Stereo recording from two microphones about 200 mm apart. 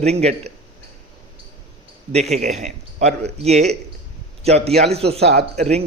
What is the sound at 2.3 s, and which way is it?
Speech, 35° right (ahead or behind).